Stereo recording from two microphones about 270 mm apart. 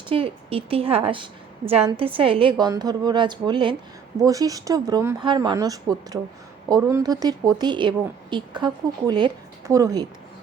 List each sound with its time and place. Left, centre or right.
0.1 s a woman's voice: centre